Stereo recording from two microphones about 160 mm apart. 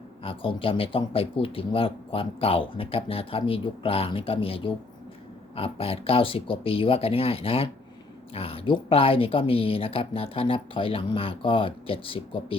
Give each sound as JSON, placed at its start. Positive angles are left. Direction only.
{"t": 0.2, "sound": "speech", "side_deg": 35}